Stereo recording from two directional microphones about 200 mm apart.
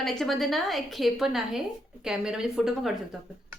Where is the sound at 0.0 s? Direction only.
Centre (ahead or behind).